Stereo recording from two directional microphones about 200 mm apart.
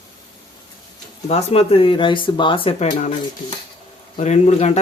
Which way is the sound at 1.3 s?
30° left (ahead or behind).